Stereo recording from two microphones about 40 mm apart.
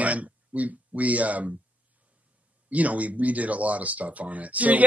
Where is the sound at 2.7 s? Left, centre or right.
Right.